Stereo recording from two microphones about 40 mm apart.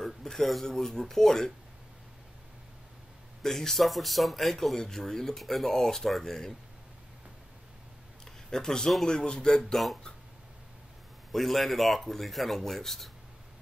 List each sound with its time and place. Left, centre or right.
0.0 s speech: centre
3.4 s speech: centre
8.5 s speech: centre
11.3 s speech: centre